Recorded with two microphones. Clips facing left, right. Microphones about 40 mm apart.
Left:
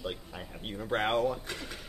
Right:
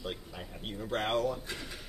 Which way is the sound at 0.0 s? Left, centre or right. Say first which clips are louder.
Left 2 dB; centre.